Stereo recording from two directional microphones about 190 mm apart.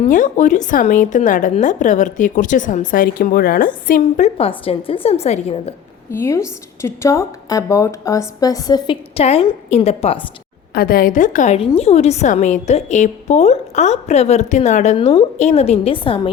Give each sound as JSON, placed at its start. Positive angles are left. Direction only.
{"t": 0.0, "sound": "a woman's voice", "side_deg": 40}
{"t": 4.4, "sound": "a woman's voice", "side_deg": 30}
{"t": 6.1, "sound": "a woman's voice", "side_deg": 15}
{"t": 10.8, "sound": "a woman's voice", "side_deg": 50}